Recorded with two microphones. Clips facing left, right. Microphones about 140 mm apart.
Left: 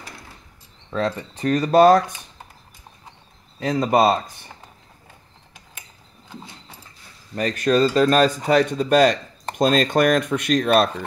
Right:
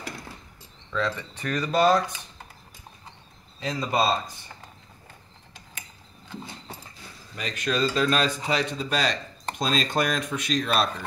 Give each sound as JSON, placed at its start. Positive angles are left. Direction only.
{"t": 0.8, "sound": "speech", "side_deg": 40}
{"t": 1.8, "sound": "speech", "side_deg": 50}
{"t": 3.5, "sound": "speech", "side_deg": 55}
{"t": 7.3, "sound": "speech", "side_deg": 45}